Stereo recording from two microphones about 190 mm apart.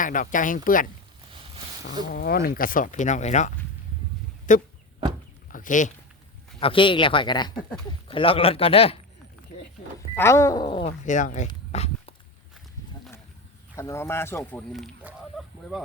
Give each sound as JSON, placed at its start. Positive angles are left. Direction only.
{"t": 0.0, "sound": "speech", "side_deg": 45}
{"t": 2.1, "sound": "speech", "side_deg": 55}
{"t": 5.5, "sound": "a sound", "side_deg": 45}
{"t": 6.6, "sound": "speech", "side_deg": 30}
{"t": 9.5, "sound": "speech", "side_deg": 45}
{"t": 10.2, "sound": "speech", "side_deg": 15}
{"t": 11.0, "sound": "speech", "side_deg": 40}
{"t": 11.7, "sound": "dog", "side_deg": 35}
{"t": 13.7, "sound": "speech", "side_deg": 15}
{"t": 14.7, "sound": "speech", "side_deg": 0}
{"t": 15.3, "sound": "fowl", "side_deg": 0}